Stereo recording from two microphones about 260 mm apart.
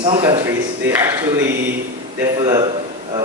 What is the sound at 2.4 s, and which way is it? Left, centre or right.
Speech, centre.